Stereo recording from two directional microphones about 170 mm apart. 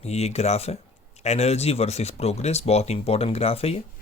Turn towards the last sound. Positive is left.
turn(degrees=35)  # may be behind; listen again after turning